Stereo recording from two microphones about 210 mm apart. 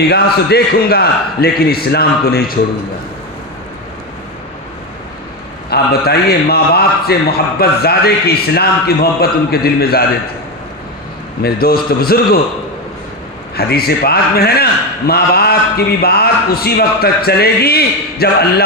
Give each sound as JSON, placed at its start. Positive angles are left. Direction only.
{"t": 0.1, "sound": "a man's voice", "side_deg": 50}
{"t": 5.7, "sound": "a man's voice", "side_deg": 50}
{"t": 11.4, "sound": "a man's voice", "side_deg": 45}
{"t": 13.6, "sound": "a man's voice", "side_deg": 50}